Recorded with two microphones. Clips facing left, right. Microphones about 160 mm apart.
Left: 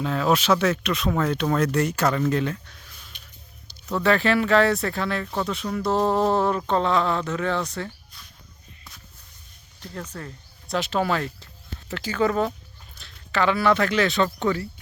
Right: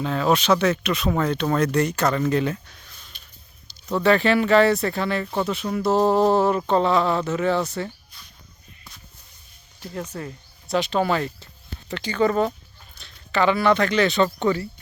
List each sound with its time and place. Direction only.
0.0 s speech: centre (ahead or behind)
3.1 s a sound: 15° left (ahead or behind)
3.8 s speech: centre (ahead or behind)
9.8 s speech: 10° right (ahead or behind)
10.8 s speech: centre (ahead or behind)